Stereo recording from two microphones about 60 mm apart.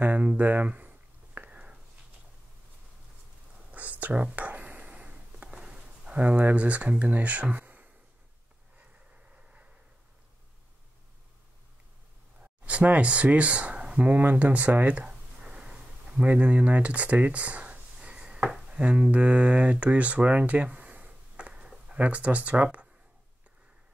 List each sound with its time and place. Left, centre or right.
0.0 s a sound: right
3.7 s whispering: right
9.3 s vehicle: right
12.6 s speech: right
14.0 s a sound: right
16.3 s speech: right